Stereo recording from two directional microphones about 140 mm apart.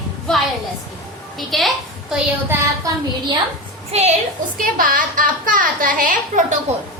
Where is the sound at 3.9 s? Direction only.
50° right (ahead or behind).